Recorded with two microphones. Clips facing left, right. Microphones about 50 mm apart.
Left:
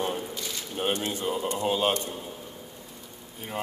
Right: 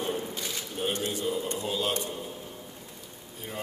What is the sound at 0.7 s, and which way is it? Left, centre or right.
Speech, left.